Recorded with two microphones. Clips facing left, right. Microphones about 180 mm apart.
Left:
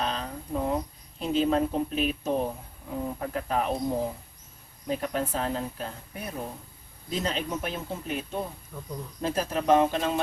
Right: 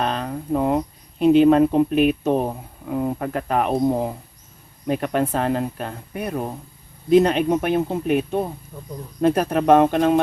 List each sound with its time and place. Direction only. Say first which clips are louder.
0.0 s speech: right 7 dB; 60° right (ahead or behind)
8.7 s speech: right 2 dB; 15° right (ahead or behind)
9.2 s speech: right 9 dB; 60° right (ahead or behind)